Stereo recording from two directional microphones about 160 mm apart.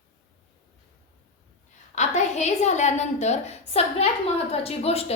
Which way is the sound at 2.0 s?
45° left (ahead or behind).